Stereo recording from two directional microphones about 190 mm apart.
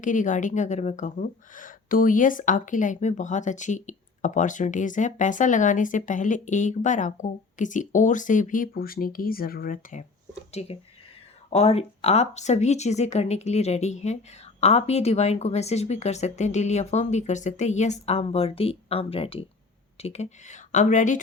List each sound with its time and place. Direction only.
0.0 s a woman's voice: 40° left (ahead or behind)